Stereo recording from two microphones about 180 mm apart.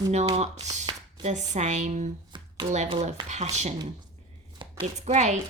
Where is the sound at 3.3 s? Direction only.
40° right (ahead or behind).